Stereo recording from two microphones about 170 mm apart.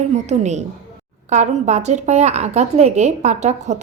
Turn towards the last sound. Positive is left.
turn(degrees=-40)  # may be behind; listen again after turning